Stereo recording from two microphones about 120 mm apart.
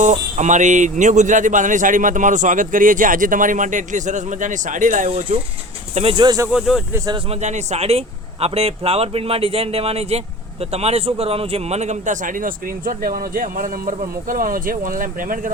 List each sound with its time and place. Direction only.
0.0 s speech: 90° right
5.0 s speech: 55° right (ahead or behind)
6.1 s speech: 35° right (ahead or behind)
6.5 s speech: 5° right (ahead or behind)
7.3 s speech: 70° right (ahead or behind); by 12.5 s 90° right